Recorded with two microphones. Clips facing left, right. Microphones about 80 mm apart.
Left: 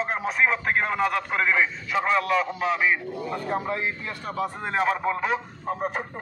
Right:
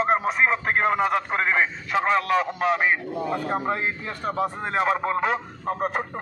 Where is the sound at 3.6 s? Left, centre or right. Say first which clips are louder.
Right 2 dB; right.